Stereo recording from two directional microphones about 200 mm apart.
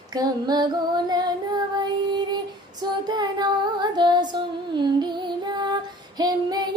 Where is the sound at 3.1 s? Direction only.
20° right (ahead or behind).